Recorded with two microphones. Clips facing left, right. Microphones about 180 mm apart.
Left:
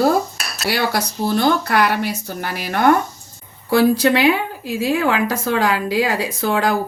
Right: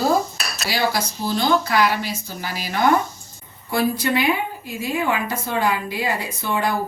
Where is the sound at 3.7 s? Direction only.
90° left.